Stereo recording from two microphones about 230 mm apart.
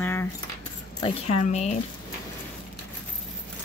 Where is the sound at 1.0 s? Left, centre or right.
Left.